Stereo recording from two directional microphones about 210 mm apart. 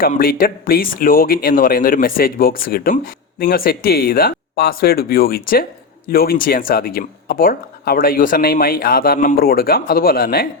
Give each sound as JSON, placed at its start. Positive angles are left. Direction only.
{"t": 0.0, "sound": "speech", "side_deg": 45}